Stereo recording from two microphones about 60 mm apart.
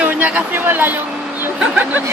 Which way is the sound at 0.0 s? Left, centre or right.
Right.